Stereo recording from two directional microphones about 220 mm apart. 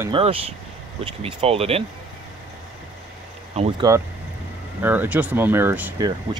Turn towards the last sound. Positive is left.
turn(degrees=-15)  # may be behind; listen again after turning